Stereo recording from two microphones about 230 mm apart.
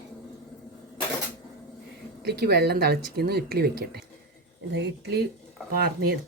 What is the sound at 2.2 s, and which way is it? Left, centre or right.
Speech, right.